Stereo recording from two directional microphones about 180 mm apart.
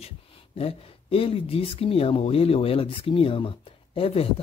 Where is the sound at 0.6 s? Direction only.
30° left (ahead or behind).